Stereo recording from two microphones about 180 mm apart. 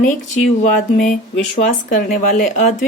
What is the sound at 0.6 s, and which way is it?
Speech, 45° left (ahead or behind).